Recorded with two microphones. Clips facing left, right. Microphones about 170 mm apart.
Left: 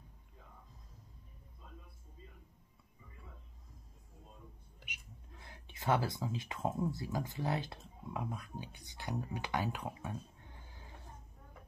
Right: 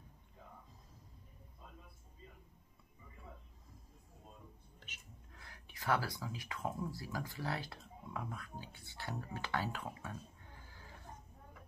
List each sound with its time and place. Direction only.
4.7 s speech: 15° left (ahead or behind)